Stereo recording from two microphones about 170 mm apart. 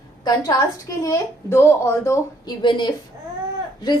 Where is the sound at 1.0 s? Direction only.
15° left (ahead or behind).